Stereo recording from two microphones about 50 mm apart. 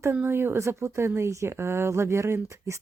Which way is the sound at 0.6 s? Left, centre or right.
Right.